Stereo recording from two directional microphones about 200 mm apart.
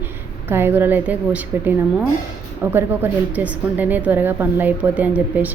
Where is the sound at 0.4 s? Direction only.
10° right (ahead or behind).